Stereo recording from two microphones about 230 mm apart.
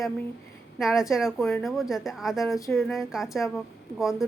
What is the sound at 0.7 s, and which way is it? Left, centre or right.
A woman's voice, centre.